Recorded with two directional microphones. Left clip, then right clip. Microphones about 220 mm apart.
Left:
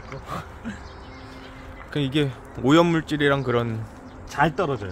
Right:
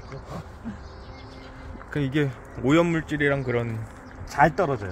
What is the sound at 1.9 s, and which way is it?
Speech, 15° left (ahead or behind).